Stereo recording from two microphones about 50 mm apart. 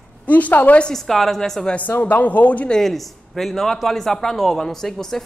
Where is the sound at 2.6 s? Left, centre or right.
Centre.